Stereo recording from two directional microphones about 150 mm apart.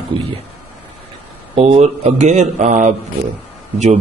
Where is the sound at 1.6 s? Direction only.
45° right (ahead or behind).